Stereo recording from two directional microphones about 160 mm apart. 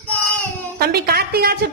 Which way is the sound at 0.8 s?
75° right (ahead or behind).